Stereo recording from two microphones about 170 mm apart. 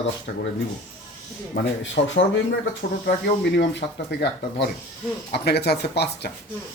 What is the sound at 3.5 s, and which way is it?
Speech, 90° left.